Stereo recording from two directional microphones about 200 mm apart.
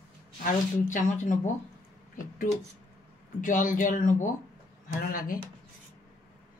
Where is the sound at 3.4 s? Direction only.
40° left (ahead or behind).